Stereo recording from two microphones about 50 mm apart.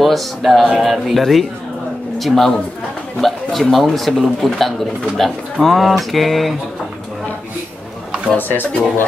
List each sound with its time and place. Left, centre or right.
0.0 s a man's voice: centre
8.4 s speech: left